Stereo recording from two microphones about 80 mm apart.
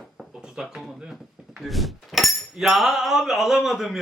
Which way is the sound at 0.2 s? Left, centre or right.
Centre.